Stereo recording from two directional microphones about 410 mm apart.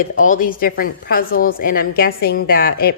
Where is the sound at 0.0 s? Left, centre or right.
Centre.